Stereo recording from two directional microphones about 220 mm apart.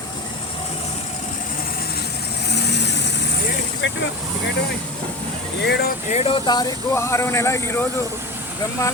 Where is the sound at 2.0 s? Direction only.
50° left (ahead or behind).